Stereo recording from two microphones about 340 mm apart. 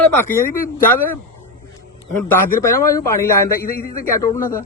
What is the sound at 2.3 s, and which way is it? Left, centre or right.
A man's voice, centre.